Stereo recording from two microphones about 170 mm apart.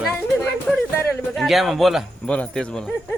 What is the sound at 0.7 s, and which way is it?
Speech, centre (ahead or behind).